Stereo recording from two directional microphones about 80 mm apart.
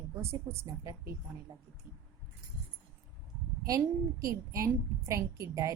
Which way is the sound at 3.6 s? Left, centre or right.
Right.